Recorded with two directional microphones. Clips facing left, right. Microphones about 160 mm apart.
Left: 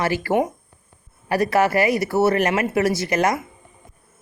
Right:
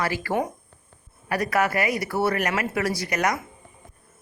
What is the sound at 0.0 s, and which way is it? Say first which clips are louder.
Speech: left 5 dB; 30° left (ahead or behind).